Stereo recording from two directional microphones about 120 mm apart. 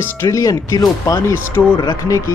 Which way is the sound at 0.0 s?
25° left (ahead or behind).